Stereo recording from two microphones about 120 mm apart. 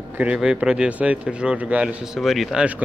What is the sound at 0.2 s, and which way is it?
Speech, 10° right (ahead or behind).